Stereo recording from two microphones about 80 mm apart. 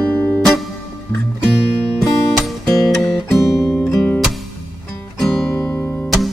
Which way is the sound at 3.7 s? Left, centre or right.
Left.